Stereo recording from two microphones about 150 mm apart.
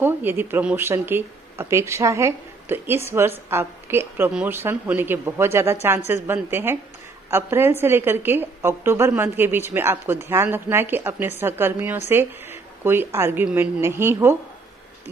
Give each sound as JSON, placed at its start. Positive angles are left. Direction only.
{"t": 0.0, "sound": "a woman's voice", "side_deg": -15}